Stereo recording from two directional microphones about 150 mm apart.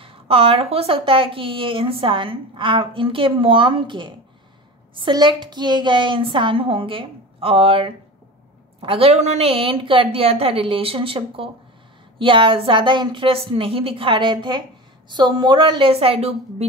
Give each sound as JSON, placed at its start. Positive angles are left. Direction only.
{"t": 0.0, "sound": "speech", "side_deg": -40}